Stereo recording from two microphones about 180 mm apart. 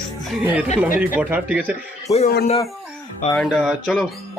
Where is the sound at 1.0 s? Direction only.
10° right (ahead or behind).